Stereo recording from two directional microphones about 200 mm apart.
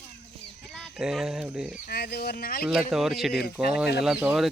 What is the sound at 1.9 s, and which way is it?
Speech, 55° left (ahead or behind).